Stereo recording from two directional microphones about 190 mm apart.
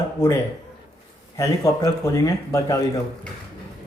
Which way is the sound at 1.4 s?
15° left (ahead or behind).